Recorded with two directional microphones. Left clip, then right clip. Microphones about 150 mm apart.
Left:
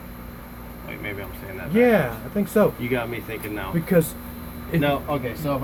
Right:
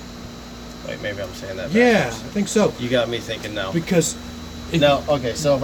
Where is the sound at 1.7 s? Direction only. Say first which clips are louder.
Right 2 dB; 10° right (ahead or behind).